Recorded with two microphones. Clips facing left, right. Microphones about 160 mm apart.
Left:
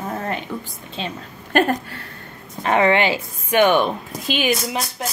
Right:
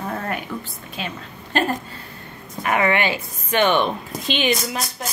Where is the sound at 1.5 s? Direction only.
55° left (ahead or behind).